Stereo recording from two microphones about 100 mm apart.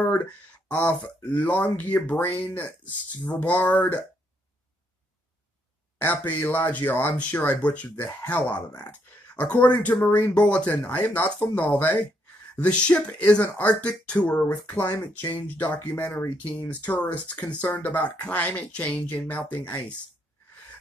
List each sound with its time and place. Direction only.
0.0 s speech: 15° left (ahead or behind)
5.9 s speech: 15° left (ahead or behind)